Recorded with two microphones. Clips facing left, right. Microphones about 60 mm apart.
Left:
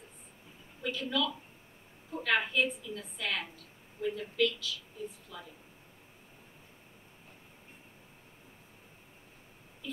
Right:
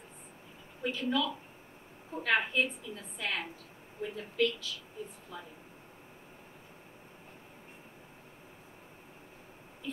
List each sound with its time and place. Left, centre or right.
0.8 s a woman's voice: right